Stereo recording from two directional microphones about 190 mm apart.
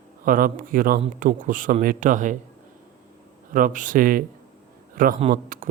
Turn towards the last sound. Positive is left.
turn(degrees=-45)  # may be behind; listen again after turning